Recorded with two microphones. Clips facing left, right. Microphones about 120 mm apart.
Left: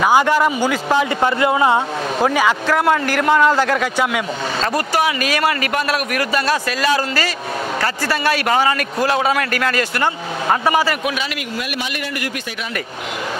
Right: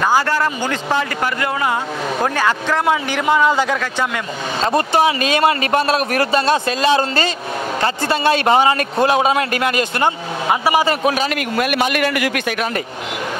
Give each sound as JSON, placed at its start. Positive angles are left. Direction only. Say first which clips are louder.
{"t": 0.0, "sound": "a man's voice", "louder": "left 2 dB", "side_deg": 15}
{"t": 1.2, "sound": "speech", "louder": "left 4 dB", "side_deg": 25}
{"t": 2.2, "sound": "a man's voice", "louder": "left 3 dB", "side_deg": 5}
{"t": 4.7, "sound": "a man's voice", "louder": "right 5 dB", "side_deg": -25}
{"t": 11.5, "sound": "a man's voice", "louder": "right 7 dB", "side_deg": -60}